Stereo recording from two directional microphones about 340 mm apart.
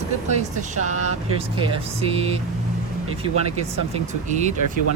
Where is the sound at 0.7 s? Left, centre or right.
Right.